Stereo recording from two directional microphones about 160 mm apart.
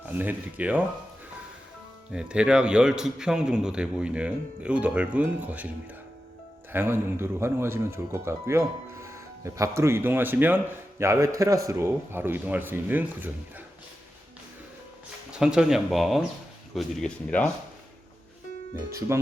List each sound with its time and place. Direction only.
0.2 s speech: 10° right (ahead or behind)
2.1 s speech: 5° right (ahead or behind)
6.7 s speech: 15° right (ahead or behind)
15.3 s speech: 5° right (ahead or behind)
18.9 s speech: 20° right (ahead or behind)